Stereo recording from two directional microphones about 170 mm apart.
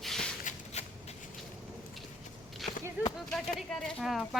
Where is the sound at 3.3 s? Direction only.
5° left (ahead or behind).